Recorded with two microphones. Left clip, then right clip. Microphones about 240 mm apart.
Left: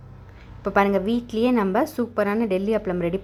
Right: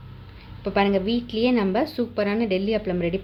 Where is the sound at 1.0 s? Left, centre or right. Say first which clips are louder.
Even; left.